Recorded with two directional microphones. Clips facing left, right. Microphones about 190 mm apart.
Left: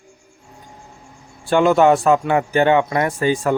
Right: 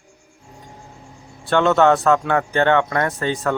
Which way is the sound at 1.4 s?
10° left (ahead or behind).